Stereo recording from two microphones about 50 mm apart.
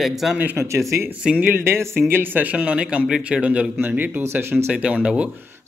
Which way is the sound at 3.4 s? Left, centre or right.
Right.